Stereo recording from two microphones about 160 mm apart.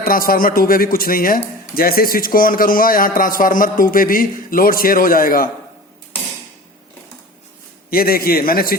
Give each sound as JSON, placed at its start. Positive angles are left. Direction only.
{"t": 0.0, "sound": "a man's voice", "side_deg": 65}
{"t": 7.9, "sound": "a man's voice", "side_deg": 70}